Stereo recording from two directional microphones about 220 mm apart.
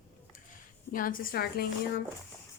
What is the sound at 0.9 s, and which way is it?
Speech, 40° left (ahead or behind).